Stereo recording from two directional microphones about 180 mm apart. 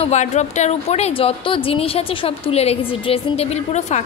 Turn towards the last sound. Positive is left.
turn(degrees=40)  # may be behind; listen again after turning